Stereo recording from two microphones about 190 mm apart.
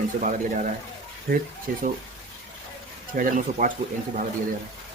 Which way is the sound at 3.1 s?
45° right (ahead or behind).